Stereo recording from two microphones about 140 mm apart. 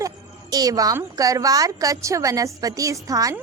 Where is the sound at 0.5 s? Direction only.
25° right (ahead or behind).